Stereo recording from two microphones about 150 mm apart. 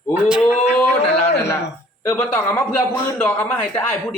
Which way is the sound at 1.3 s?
20° left (ahead or behind).